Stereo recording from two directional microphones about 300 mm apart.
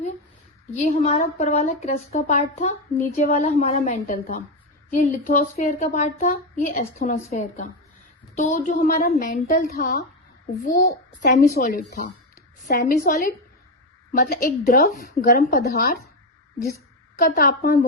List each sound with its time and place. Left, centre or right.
0.7 s a woman's voice: left
14.1 s a woman's voice: left
17.2 s a woman's voice: left